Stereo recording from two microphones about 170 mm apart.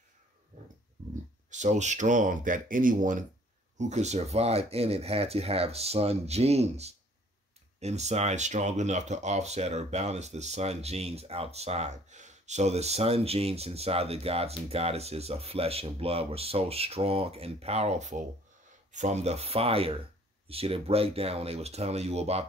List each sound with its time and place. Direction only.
1.5 s speech: 45° right (ahead or behind)